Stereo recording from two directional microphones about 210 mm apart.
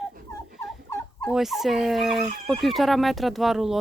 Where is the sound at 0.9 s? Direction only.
10° left (ahead or behind).